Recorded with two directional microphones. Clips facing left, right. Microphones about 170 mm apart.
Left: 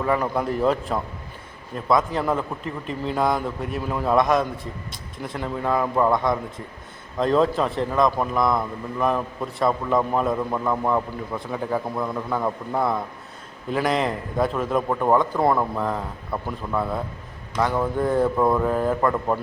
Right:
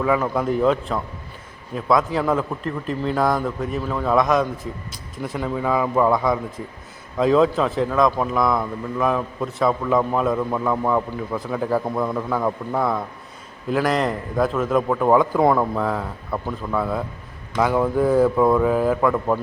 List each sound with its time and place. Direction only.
0.3 s a man's voice: centre (ahead or behind)